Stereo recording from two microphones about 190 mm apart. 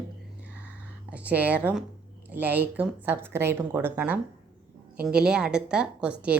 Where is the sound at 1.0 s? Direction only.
5° right (ahead or behind).